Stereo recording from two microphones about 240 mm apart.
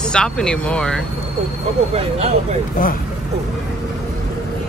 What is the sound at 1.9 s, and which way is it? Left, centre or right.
Speech, right.